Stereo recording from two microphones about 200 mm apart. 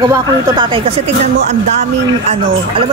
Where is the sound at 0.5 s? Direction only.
25° right (ahead or behind).